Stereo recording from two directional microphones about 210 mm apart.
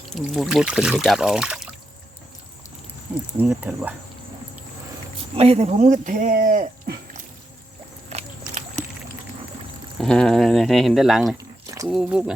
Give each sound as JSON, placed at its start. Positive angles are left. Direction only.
{"t": 0.1, "sound": "speech", "side_deg": 0}
{"t": 3.3, "sound": "speech", "side_deg": -5}
{"t": 5.3, "sound": "speech", "side_deg": -30}
{"t": 8.1, "sound": "a sound", "side_deg": -30}
{"t": 10.0, "sound": "speech", "side_deg": 5}
{"t": 11.3, "sound": "biting", "side_deg": -15}
{"t": 11.9, "sound": "speech", "side_deg": -5}